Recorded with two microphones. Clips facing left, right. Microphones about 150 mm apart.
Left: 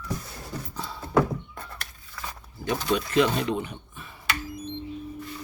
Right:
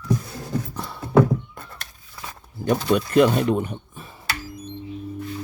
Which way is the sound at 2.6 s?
50° right (ahead or behind).